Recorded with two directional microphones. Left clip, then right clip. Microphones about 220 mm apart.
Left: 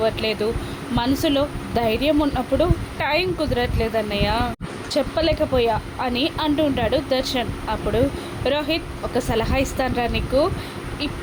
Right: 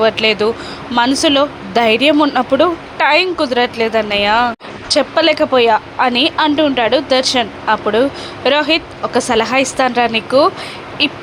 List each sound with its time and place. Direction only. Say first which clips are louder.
0.0 s speech: right 9 dB; 15° right (ahead or behind)